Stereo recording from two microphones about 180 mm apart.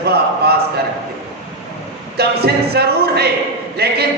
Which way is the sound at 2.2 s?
60° right (ahead or behind).